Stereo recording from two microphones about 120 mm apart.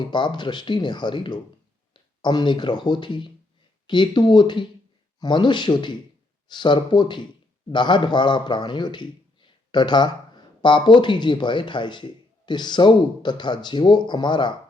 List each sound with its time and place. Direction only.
0.0 s a man's voice: 40° left (ahead or behind)